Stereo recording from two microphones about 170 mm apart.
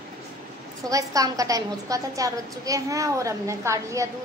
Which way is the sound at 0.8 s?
20° right (ahead or behind).